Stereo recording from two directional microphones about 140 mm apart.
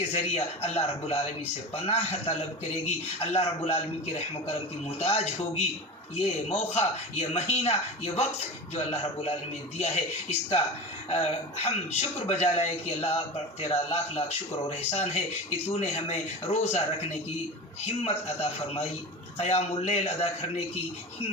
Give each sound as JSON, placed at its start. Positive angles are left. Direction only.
{"t": 0.1, "sound": "speech", "side_deg": 50}
{"t": 19.4, "sound": "speech", "side_deg": 50}